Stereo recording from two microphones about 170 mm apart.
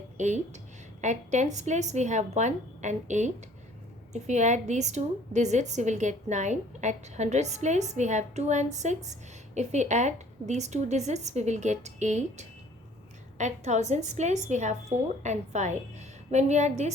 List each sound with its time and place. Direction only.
0.2 s a woman's voice: 45° right (ahead or behind)